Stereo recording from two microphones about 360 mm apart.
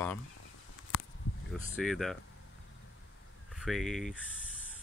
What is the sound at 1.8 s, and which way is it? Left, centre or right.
Speech, centre.